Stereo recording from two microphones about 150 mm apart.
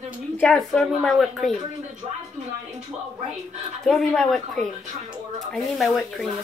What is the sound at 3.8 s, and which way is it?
A woman's voice, centre (ahead or behind).